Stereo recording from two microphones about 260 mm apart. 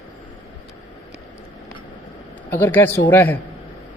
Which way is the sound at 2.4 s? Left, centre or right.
Centre.